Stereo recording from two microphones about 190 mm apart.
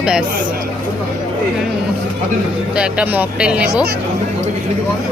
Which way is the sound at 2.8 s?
5° right (ahead or behind).